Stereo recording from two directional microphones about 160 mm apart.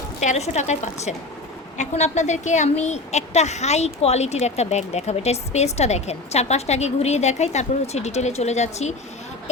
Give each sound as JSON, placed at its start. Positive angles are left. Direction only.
{"t": 0.2, "sound": "a woman's voice", "side_deg": 45}